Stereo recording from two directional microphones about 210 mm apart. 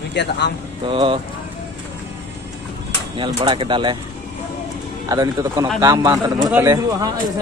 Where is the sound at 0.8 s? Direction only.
25° right (ahead or behind).